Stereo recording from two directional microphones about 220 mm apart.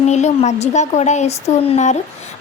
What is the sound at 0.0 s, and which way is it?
A woman's voice, 30° left (ahead or behind).